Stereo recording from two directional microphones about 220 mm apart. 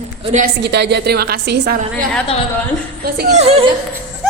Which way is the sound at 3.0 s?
45° right (ahead or behind).